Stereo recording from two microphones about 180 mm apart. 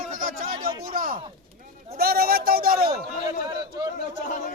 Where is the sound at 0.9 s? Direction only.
50° right (ahead or behind).